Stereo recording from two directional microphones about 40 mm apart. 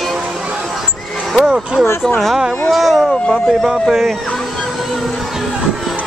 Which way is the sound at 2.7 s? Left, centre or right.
Centre.